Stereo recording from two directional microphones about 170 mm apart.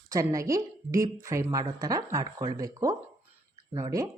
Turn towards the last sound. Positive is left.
turn(degrees=-20)  # may be behind; listen again after turning